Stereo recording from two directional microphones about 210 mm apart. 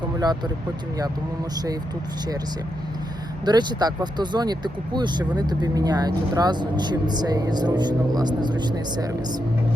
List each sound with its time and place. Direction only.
0.2 s speech: 20° right (ahead or behind)
3.4 s speech: 20° right (ahead or behind)